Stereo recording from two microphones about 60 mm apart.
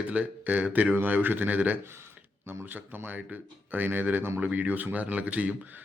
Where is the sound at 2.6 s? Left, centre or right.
Right.